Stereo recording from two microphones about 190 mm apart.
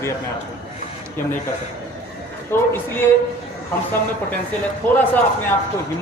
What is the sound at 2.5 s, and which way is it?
Speech, 10° left (ahead or behind).